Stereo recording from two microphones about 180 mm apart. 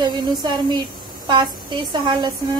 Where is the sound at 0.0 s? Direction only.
25° right (ahead or behind).